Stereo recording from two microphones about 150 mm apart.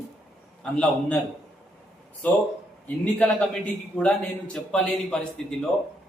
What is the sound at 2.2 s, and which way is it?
A man's voice, 10° left (ahead or behind).